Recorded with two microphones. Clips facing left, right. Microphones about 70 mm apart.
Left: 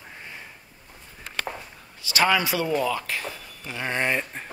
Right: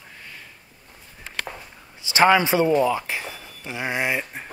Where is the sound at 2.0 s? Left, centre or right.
Right.